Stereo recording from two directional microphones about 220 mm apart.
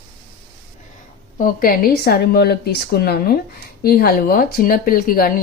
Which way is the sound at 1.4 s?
40° left (ahead or behind).